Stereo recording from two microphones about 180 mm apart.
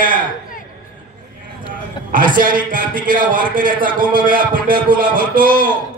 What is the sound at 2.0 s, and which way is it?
A man's voice, 50° right (ahead or behind).